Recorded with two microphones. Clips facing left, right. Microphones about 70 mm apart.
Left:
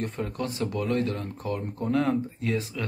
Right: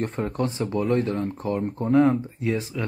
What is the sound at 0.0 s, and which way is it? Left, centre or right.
Speech, right.